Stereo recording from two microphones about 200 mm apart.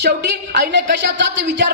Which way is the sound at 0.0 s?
55° right (ahead or behind).